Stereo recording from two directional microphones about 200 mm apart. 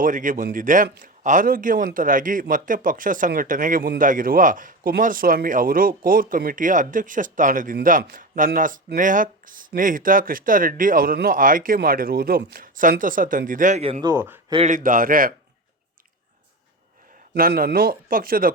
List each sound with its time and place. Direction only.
0.0 s a man's voice: 40° right (ahead or behind)
14.0 s speech: 15° right (ahead or behind)
14.5 s speech: 35° right (ahead or behind)
17.3 s speech: 45° right (ahead or behind)